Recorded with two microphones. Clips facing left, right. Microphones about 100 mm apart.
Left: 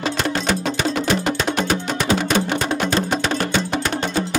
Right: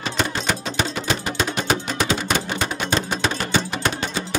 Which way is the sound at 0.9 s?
55° left (ahead or behind).